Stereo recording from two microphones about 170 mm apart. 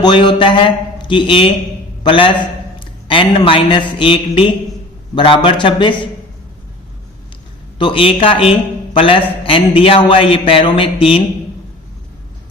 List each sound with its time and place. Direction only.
0.0 s a man's voice: 30° left (ahead or behind)
7.8 s a man's voice: 30° left (ahead or behind)